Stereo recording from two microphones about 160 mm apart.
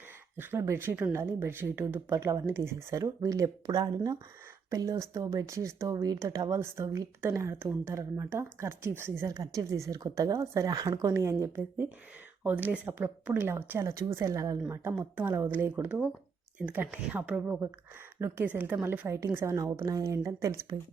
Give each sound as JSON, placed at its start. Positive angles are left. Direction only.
{"t": 0.3, "sound": "speech", "side_deg": -15}